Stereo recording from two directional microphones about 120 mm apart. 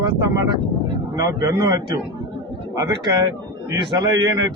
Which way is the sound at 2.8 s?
30° right (ahead or behind).